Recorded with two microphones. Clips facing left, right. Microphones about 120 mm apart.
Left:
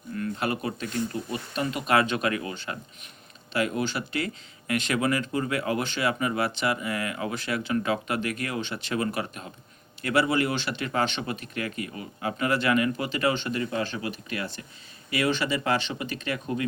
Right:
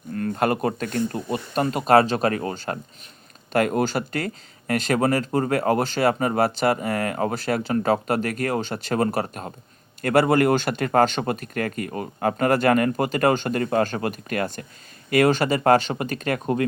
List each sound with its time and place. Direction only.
0.1 s speech: 45° right (ahead or behind)